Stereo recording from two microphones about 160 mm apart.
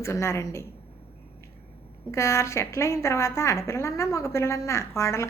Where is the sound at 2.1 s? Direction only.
20° left (ahead or behind).